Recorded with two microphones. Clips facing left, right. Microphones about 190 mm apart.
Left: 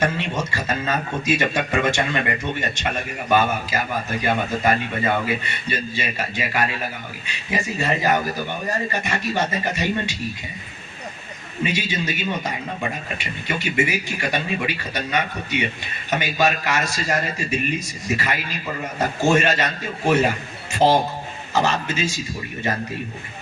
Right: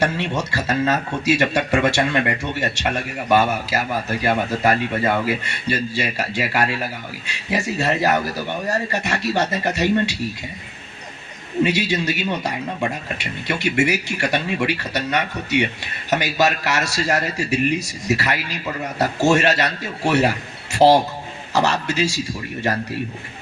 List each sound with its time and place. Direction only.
0.0 s speech: 70° right (ahead or behind)
11.6 s speech: 70° right (ahead or behind)
21.5 s speech: 75° right (ahead or behind)